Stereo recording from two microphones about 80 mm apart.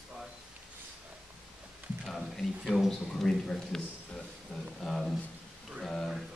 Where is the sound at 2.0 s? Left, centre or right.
Centre.